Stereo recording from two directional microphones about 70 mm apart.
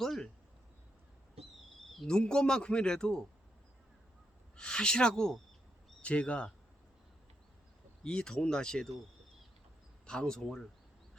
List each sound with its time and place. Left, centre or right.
0.0 s speech: centre
1.9 s speech: centre
4.5 s speech: centre
8.0 s speech: centre
10.1 s speech: centre